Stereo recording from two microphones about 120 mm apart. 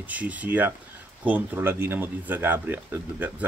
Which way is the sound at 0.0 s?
10° right (ahead or behind).